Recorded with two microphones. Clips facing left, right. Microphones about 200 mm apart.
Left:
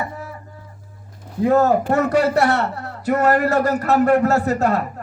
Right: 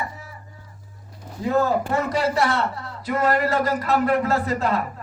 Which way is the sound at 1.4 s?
50° left (ahead or behind).